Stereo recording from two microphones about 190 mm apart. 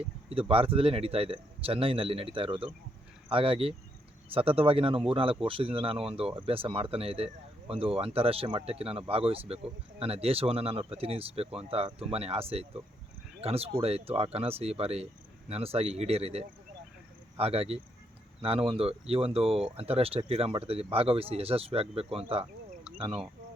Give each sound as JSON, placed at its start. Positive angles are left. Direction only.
{"t": 0.0, "sound": "speech", "side_deg": -30}